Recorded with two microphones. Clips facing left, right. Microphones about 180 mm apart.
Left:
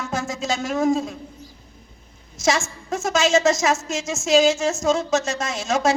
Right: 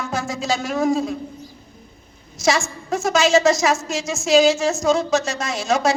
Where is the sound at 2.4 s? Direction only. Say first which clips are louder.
Right 2 dB; 25° left (ahead or behind).